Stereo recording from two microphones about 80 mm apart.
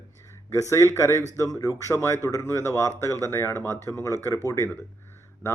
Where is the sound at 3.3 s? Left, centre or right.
Left.